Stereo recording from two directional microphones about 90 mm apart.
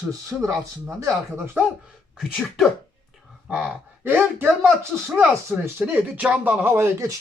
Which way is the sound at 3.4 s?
15° right (ahead or behind).